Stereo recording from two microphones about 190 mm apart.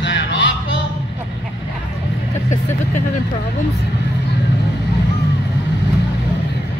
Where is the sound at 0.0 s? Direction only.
70° left (ahead or behind).